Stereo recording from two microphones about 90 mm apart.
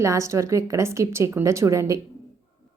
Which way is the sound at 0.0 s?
35° right (ahead or behind).